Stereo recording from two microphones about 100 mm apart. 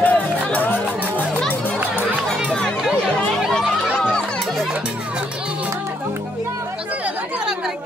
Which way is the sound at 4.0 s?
10° left (ahead or behind).